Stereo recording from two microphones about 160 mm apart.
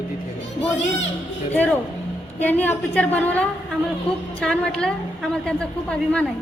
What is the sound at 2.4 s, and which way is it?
A woman's voice, 10° left (ahead or behind).